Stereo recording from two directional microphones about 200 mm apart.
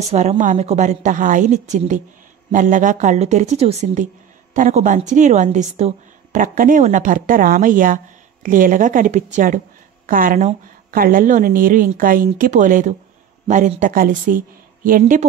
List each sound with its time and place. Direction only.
0.1 s a woman's voice: 35° right (ahead or behind)